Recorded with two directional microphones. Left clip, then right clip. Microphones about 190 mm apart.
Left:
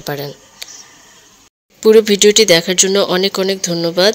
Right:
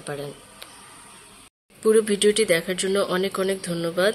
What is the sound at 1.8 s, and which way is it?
Speech, 35° left (ahead or behind).